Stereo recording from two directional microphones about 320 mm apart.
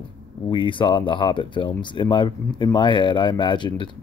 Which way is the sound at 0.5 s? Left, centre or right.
Centre.